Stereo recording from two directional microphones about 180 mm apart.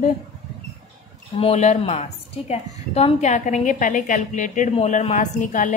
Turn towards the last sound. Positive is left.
turn(degrees=45)  # may be behind; listen again after turning